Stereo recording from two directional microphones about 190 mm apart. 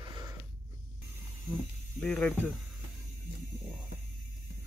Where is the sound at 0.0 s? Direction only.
25° right (ahead or behind).